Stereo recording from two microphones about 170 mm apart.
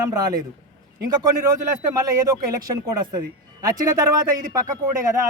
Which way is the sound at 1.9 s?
20° right (ahead or behind).